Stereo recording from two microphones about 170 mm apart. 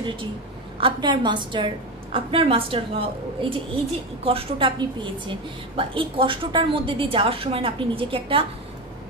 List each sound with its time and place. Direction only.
0.0 s a woman's voice: 30° right (ahead or behind)